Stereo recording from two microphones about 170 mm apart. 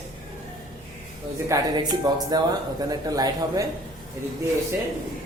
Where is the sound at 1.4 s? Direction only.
20° right (ahead or behind).